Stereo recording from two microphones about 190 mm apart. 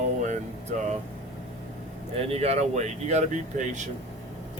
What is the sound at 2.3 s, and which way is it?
Speech, 35° right (ahead or behind).